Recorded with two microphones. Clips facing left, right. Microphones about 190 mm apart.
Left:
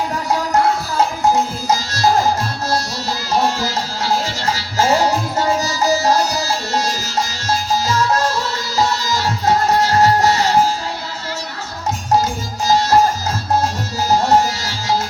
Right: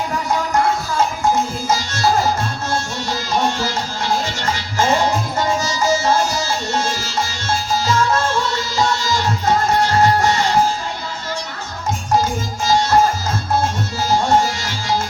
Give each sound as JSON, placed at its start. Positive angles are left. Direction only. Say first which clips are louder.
{"t": 1.6, "sound": "music", "louder": "left 2 dB", "side_deg": 35}
{"t": 12.6, "sound": "music", "louder": "left 1 dB", "side_deg": 35}
{"t": 14.1, "sound": "music", "louder": "left 2 dB", "side_deg": 35}